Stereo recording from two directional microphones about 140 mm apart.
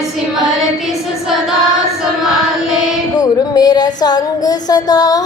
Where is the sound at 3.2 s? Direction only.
30° left (ahead or behind).